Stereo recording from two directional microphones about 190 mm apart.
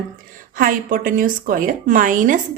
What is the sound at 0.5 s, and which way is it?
A woman's voice, 45° right (ahead or behind).